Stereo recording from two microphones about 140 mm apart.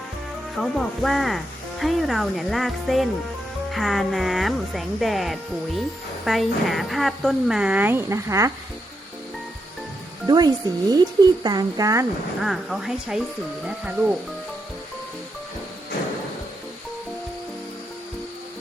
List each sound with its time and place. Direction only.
0.5 s a woman's voice: centre (ahead or behind); by 8.5 s 20° right (ahead or behind)
10.2 s speech: 30° right (ahead or behind)
12.4 s a woman's voice: 5° right (ahead or behind)